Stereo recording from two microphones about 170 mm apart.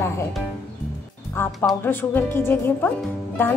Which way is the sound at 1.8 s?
10° left (ahead or behind).